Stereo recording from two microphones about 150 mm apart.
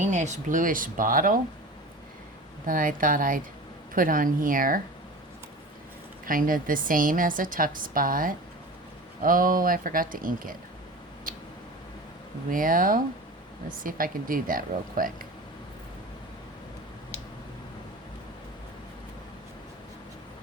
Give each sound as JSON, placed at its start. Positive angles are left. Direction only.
{"t": 0.0, "sound": "a woman's voice", "side_deg": -55}
{"t": 2.6, "sound": "a woman's voice", "side_deg": -65}
{"t": 6.2, "sound": "a woman's voice", "side_deg": -65}
{"t": 11.3, "sound": "tick-tock", "side_deg": -65}
{"t": 12.5, "sound": "speech", "side_deg": -65}